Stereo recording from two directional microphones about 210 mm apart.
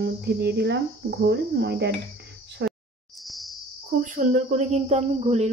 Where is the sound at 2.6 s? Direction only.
55° right (ahead or behind).